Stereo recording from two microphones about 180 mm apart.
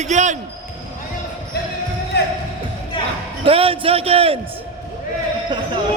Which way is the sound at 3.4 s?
30° right (ahead or behind).